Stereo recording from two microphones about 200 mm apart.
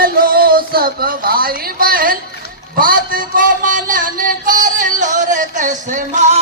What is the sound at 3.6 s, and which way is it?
Music, 40° right (ahead or behind).